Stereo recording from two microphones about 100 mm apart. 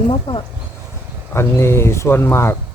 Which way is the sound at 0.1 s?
60° left (ahead or behind).